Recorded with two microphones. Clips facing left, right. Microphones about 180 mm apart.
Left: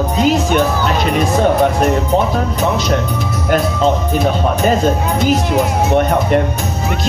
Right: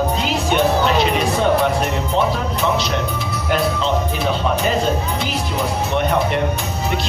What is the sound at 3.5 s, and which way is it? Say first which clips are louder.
Speech: left 5 dB; 45° left (ahead or behind).